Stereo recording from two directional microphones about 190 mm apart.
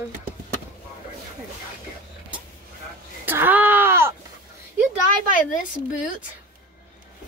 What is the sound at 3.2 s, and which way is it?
Speech, 10° right (ahead or behind).